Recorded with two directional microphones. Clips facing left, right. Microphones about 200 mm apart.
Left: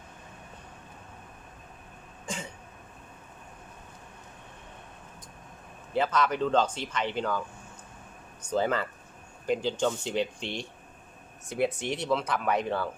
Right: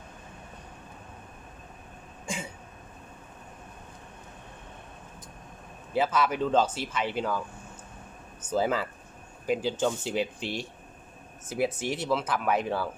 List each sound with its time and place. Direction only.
2.2 s throat clearing: 10° right (ahead or behind)
5.9 s speech: 5° right (ahead or behind)